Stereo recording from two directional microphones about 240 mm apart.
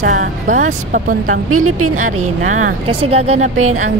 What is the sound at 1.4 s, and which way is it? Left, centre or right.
Speech, right.